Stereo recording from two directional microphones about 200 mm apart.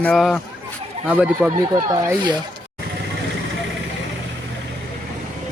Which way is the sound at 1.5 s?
20° right (ahead or behind).